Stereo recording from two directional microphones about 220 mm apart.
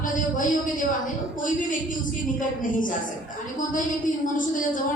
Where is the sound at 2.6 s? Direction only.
35° left (ahead or behind).